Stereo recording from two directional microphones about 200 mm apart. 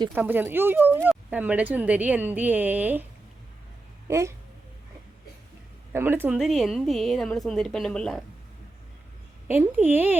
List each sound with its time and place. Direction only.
0.1 s a woman's voice: 10° right (ahead or behind)
4.1 s a woman's voice: 15° right (ahead or behind)
5.9 s a woman's voice: 10° right (ahead or behind)
9.5 s a woman's voice: 10° right (ahead or behind)